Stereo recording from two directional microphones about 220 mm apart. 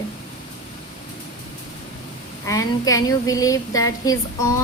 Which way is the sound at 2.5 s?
15° left (ahead or behind).